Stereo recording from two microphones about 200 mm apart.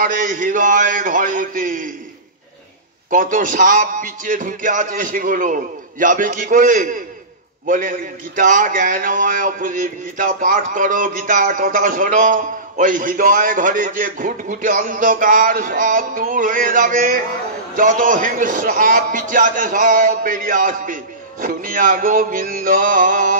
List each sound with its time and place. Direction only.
0.0 s a man's voice: 40° right (ahead or behind)
3.1 s a man's voice: 40° right (ahead or behind)